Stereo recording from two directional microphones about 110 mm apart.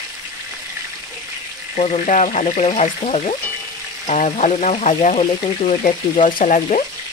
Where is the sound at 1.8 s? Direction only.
85° left.